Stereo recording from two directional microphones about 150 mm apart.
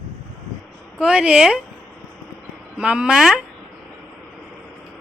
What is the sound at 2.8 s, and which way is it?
Speech, 5° right (ahead or behind).